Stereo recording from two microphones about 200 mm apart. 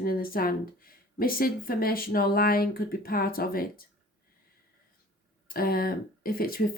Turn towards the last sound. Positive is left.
turn(degrees=45)  # may be behind; listen again after turning